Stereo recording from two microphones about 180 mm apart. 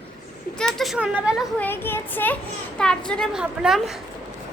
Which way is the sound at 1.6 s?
10° left (ahead or behind).